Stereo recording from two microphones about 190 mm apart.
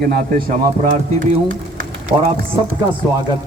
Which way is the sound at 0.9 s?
40° right (ahead or behind).